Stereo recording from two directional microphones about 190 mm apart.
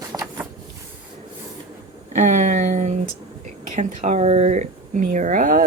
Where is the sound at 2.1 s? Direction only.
40° right (ahead or behind).